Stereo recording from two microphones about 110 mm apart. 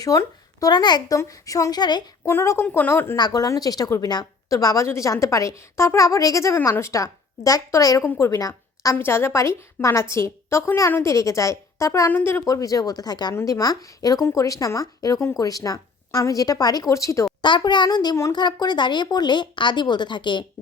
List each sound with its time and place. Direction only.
0.0 s speech: 30° left (ahead or behind)
2.2 s a woman's voice: 25° left (ahead or behind)
3.2 s a woman's voice: 35° left (ahead or behind)
17.4 s a woman's voice: 45° left (ahead or behind)